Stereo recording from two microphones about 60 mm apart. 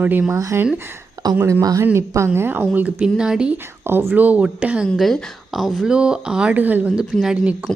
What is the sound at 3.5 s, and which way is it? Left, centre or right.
A woman's voice, right.